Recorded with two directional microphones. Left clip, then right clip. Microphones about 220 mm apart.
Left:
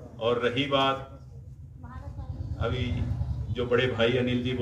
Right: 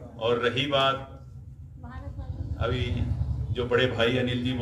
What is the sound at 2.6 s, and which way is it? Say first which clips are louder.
A man's voice: right 2 dB; 30° right (ahead or behind).